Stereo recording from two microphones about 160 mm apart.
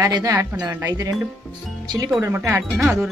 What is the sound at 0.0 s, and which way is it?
Speech, 20° right (ahead or behind).